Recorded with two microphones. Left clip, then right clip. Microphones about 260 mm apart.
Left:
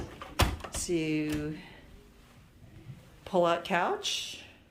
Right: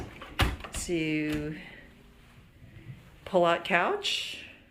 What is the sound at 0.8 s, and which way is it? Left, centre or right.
Speech, centre.